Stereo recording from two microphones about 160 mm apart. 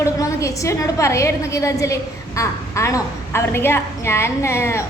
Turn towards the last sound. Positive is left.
turn(degrees=15)  # may be behind; listen again after turning